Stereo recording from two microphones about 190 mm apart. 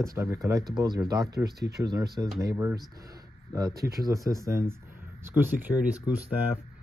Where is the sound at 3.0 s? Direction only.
20° right (ahead or behind).